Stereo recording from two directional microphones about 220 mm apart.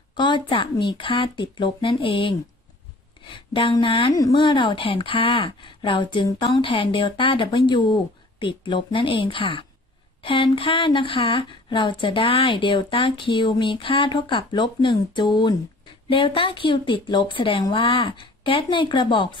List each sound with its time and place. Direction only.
0.1 s a woman's voice: 20° left (ahead or behind)